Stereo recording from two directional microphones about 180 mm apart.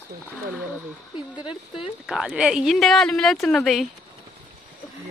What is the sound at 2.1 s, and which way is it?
A woman's voice, 5° right (ahead or behind).